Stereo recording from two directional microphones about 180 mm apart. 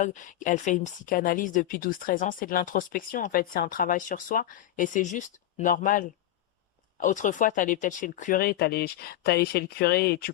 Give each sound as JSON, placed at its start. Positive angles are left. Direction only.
{"t": 0.0, "sound": "speech", "side_deg": 45}